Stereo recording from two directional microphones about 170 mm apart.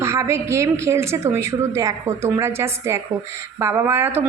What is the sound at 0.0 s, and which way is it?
A woman's voice, 15° right (ahead or behind).